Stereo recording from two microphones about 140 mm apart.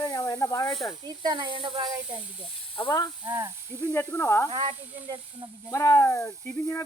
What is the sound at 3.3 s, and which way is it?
Speech, 15° right (ahead or behind).